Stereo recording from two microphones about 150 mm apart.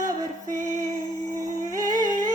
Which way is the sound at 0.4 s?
55° right (ahead or behind).